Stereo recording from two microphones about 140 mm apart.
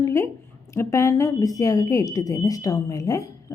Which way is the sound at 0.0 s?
20° left (ahead or behind).